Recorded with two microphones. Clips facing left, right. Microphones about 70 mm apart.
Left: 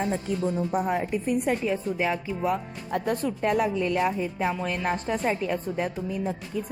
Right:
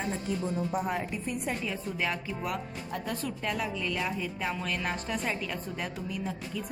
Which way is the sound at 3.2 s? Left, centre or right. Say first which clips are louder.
Left 9 dB; left.